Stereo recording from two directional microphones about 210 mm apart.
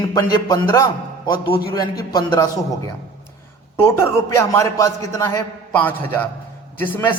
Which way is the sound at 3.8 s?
10° left (ahead or behind).